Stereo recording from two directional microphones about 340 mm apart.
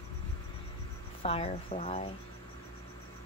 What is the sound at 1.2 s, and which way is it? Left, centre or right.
Speech, centre.